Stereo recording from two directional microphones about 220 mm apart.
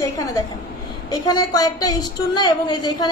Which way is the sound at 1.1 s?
15° left (ahead or behind).